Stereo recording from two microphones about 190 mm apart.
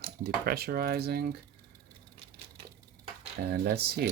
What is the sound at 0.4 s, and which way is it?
Speech, 55° right (ahead or behind).